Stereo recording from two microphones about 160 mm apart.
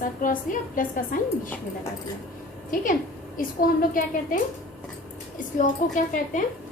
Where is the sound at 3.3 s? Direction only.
60° left (ahead or behind).